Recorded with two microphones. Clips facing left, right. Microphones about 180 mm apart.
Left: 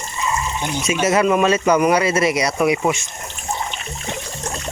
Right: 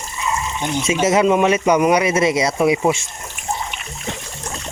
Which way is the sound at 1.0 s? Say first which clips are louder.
Right 1 dB; 20° right (ahead or behind).